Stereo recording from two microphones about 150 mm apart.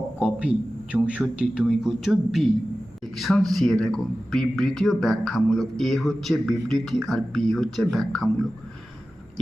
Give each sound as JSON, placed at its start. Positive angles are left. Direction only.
{"t": 0.2, "sound": "a man's voice", "side_deg": -5}